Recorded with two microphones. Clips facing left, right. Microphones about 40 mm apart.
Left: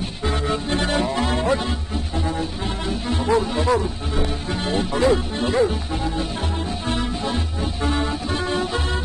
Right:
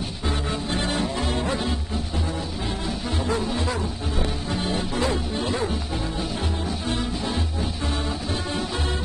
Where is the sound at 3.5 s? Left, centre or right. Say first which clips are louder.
Left 7 dB; left.